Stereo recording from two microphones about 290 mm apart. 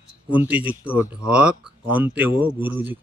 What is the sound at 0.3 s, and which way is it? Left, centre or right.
Speech, centre.